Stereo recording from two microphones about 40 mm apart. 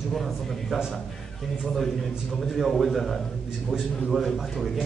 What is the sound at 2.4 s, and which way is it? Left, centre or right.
Speech, centre.